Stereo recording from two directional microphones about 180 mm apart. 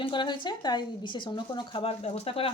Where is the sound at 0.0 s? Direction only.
25° left (ahead or behind).